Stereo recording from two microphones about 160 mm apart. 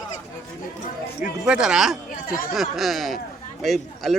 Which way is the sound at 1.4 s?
5° right (ahead or behind).